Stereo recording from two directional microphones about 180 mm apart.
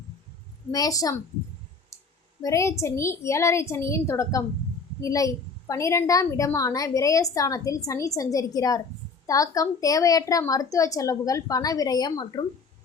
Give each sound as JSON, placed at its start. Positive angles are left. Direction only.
{"t": 0.7, "sound": "a woman's voice", "side_deg": 20}
{"t": 2.4, "sound": "a woman's voice", "side_deg": 15}